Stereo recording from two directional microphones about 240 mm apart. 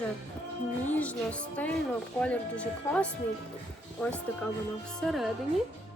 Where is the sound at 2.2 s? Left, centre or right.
Centre.